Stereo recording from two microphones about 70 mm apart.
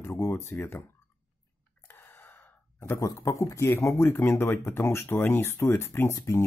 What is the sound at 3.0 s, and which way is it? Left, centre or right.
Speech, left.